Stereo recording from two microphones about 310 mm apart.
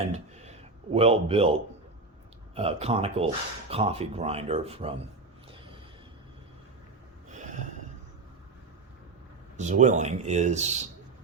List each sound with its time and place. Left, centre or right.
0.9 s speech: centre
2.6 s speech: centre
7.3 s snort: right
9.6 s speech: right